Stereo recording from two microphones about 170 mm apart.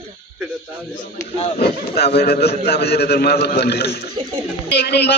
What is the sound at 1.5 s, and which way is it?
A man's voice, 70° left (ahead or behind).